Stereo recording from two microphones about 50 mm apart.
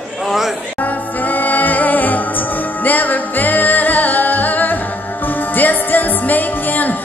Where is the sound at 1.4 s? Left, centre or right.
Left.